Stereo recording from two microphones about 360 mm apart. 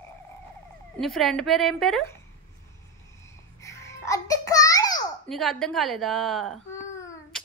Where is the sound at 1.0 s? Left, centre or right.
Centre.